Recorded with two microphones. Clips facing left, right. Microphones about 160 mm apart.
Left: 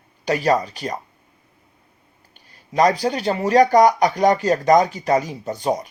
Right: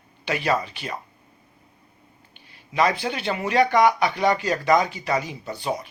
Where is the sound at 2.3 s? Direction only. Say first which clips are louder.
Left 5 dB; 40° left (ahead or behind).